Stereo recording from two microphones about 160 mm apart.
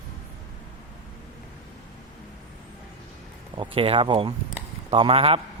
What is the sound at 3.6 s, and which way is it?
A man's voice, 35° right (ahead or behind).